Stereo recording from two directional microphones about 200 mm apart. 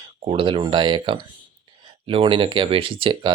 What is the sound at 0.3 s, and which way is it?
Speech, 25° right (ahead or behind).